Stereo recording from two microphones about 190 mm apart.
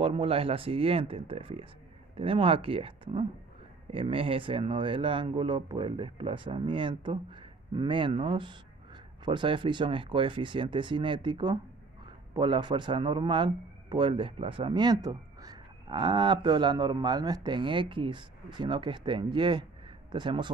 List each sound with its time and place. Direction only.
0.0 s speech: 30° right (ahead or behind)